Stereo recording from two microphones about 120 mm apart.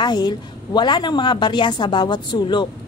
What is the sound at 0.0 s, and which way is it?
A woman's voice, 35° left (ahead or behind).